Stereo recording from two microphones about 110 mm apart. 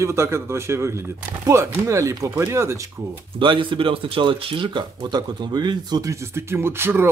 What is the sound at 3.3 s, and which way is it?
Speech, 50° right (ahead or behind).